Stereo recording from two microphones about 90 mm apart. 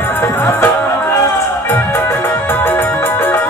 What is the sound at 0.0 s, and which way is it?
Music, 25° left (ahead or behind).